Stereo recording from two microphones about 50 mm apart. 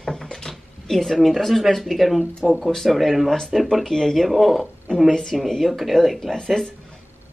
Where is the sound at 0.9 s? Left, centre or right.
Centre.